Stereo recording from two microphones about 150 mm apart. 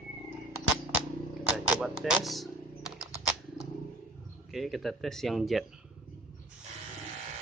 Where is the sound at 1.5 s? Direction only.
5° right (ahead or behind).